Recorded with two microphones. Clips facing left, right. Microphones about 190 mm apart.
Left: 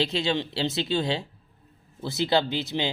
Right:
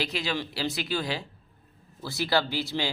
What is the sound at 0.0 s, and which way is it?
Speech, 25° left (ahead or behind).